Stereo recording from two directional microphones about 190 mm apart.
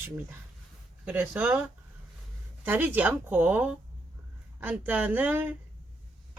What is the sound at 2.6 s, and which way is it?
Speech, 10° right (ahead or behind).